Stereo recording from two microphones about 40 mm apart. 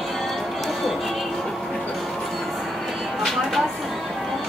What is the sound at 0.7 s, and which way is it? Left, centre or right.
Music, centre.